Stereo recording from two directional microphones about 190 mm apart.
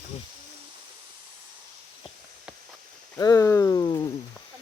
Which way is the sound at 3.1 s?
15° left (ahead or behind).